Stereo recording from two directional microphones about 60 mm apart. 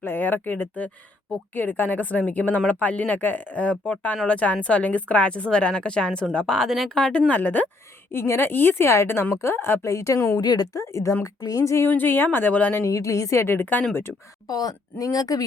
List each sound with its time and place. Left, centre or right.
0.0 s a woman's voice: left; by 6.9 s centre
6.9 s speech: centre
8.1 s a woman's voice: left
8.9 s a woman's voice: left
9.9 s speech: left
10.3 s speech: left
10.9 s speech: left
11.9 s a woman's voice: left
12.8 s speech: left
13.4 s a woman's voice: left
14.4 s speech: left